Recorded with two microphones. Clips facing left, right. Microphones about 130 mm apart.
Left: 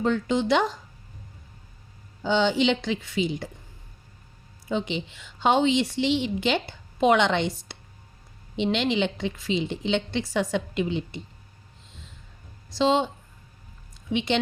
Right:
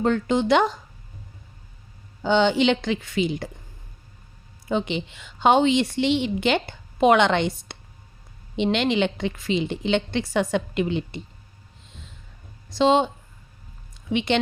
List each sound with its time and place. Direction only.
0.0 s a woman's voice: 55° right (ahead or behind)
2.2 s a woman's voice: 60° right (ahead or behind)
4.7 s a woman's voice: 60° right (ahead or behind)
12.7 s a woman's voice: 60° right (ahead or behind)
14.1 s a woman's voice: 60° right (ahead or behind)